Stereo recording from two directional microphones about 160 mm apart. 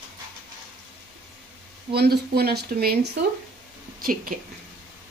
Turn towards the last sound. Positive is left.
turn(degrees=-65)  # may be behind; listen again after turning